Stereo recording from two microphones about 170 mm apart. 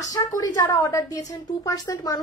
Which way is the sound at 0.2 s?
25° left (ahead or behind).